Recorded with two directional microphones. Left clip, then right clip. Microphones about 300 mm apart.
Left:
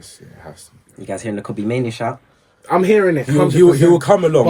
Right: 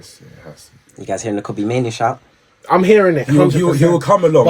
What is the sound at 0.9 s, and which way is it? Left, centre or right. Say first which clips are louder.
Speech: right 4 dB; centre.